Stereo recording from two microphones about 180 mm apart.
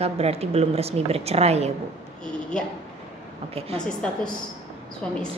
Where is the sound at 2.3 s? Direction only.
5° left (ahead or behind).